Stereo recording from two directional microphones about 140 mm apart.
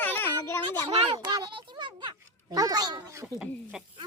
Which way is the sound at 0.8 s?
30° right (ahead or behind).